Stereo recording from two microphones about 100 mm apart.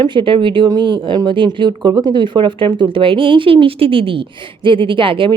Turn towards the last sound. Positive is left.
turn(degrees=-60)  # may be behind; listen again after turning